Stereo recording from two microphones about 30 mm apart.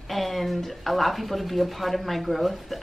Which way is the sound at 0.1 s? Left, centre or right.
Centre.